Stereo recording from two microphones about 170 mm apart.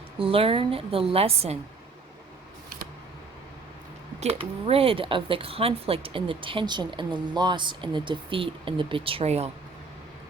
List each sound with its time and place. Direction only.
0.2 s speech: 35° right (ahead or behind)
4.2 s speech: 35° right (ahead or behind)